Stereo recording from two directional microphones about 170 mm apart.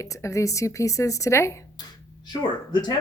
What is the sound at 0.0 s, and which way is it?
Speech, 20° left (ahead or behind).